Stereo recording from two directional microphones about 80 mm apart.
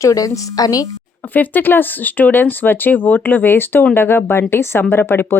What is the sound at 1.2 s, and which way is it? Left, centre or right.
Speech, left.